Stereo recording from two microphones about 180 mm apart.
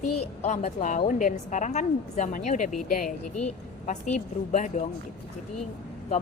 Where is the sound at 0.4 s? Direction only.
40° left (ahead or behind).